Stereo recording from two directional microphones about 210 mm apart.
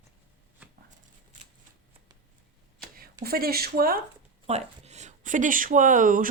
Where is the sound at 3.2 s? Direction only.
45° right (ahead or behind).